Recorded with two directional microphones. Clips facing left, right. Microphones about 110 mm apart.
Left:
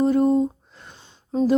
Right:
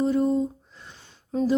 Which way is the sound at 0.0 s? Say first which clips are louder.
Left 4 dB; 55° left (ahead or behind).